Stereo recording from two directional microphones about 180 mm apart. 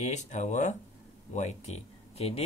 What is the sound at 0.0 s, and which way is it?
Speech, 40° left (ahead or behind).